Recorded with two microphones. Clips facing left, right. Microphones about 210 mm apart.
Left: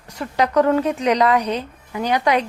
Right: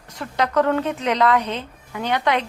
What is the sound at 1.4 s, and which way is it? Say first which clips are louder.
Speech: left 4 dB; 40° left (ahead or behind).